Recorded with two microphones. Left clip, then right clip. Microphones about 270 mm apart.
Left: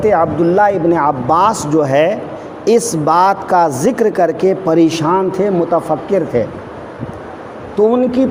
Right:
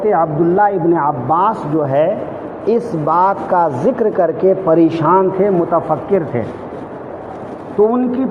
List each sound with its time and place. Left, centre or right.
0.1 s a woman's voice: left
7.8 s a woman's voice: left